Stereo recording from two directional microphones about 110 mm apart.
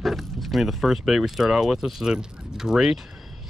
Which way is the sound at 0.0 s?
Centre (ahead or behind).